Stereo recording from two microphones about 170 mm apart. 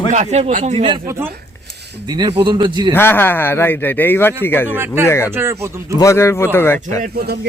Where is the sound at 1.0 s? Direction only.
15° right (ahead or behind).